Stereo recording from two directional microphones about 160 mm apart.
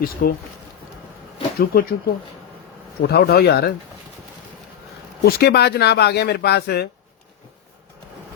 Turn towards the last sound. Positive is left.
turn(degrees=90)